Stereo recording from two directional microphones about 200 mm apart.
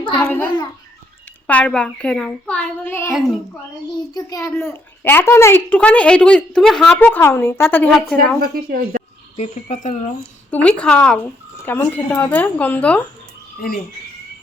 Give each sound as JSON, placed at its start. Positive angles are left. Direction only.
{"t": 0.2, "sound": "a child's voice", "side_deg": 5}
{"t": 4.1, "sound": "a child's voice", "side_deg": 15}
{"t": 8.5, "sound": "speech", "side_deg": -45}
{"t": 9.3, "sound": "speech", "side_deg": 35}
{"t": 10.5, "sound": "a child's voice", "side_deg": 5}
{"t": 13.6, "sound": "speech", "side_deg": 45}